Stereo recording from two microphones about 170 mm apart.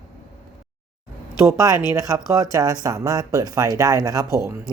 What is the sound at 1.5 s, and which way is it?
Speech, 20° right (ahead or behind).